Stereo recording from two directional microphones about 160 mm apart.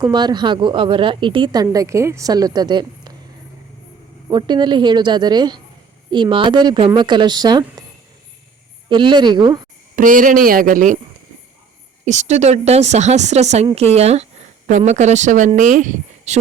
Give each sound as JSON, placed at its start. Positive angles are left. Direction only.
{"t": 0.0, "sound": "a woman's voice", "side_deg": -25}
{"t": 1.6, "sound": "speech", "side_deg": -20}
{"t": 4.3, "sound": "speech", "side_deg": -30}
{"t": 8.9, "sound": "speech", "side_deg": -30}
{"t": 9.9, "sound": "speech", "side_deg": -60}
{"t": 12.0, "sound": "a woman's voice", "side_deg": -45}